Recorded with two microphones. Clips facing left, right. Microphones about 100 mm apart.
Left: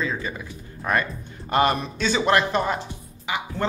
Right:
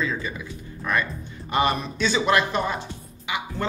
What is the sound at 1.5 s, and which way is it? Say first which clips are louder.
A man's voice: left 2 dB; 40° left (ahead or behind).